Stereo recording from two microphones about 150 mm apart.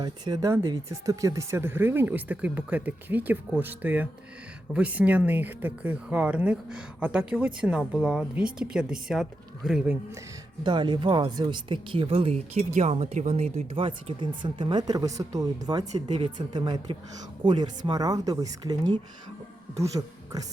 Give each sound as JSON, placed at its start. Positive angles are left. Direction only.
{"t": 0.0, "sound": "speech", "side_deg": -25}
{"t": 10.6, "sound": "speech", "side_deg": -30}